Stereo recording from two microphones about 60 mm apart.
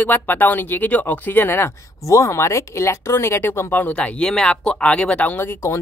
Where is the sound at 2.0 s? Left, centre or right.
Left.